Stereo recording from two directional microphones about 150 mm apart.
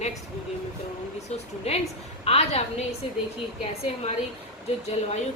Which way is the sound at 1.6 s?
45° left (ahead or behind).